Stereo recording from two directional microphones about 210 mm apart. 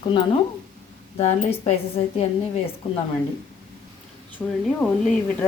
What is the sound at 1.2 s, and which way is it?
Speech, 30° left (ahead or behind).